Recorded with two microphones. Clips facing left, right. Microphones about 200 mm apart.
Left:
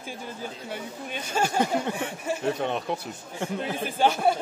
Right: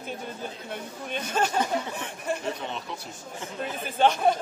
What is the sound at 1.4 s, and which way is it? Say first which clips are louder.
Speech: even; 10° left (ahead or behind).